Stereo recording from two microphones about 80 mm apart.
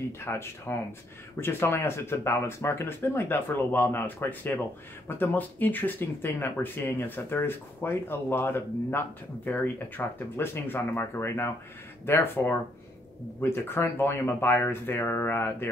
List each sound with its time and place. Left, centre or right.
0.2 s speech: left